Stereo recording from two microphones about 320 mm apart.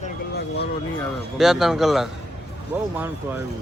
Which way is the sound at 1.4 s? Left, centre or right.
Centre.